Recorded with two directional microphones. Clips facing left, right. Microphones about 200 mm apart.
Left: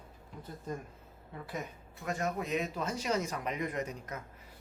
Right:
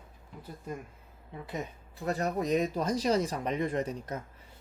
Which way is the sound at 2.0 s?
35° right (ahead or behind).